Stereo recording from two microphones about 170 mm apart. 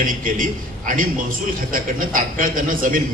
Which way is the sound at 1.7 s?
55° right (ahead or behind).